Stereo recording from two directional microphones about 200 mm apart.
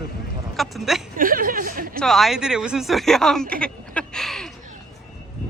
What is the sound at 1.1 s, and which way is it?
Speech, 45° right (ahead or behind).